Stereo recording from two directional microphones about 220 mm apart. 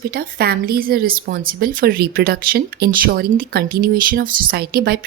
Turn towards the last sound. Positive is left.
turn(degrees=-45)  # may be behind; listen again after turning